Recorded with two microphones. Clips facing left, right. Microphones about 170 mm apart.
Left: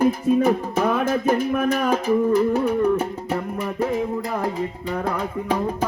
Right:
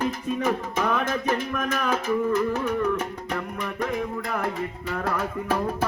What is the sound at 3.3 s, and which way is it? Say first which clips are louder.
Music: left 5 dB; 30° left (ahead or behind).